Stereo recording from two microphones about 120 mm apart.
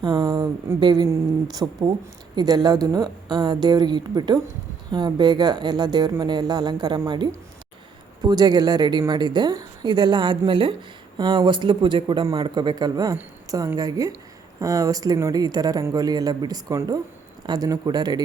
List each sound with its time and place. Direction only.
0.0 s a woman's voice: 35° right (ahead or behind)
1.0 s a woman's voice: 25° right (ahead or behind)
2.3 s a woman's voice: 35° right (ahead or behind)
8.2 s a woman's voice: 35° right (ahead or behind)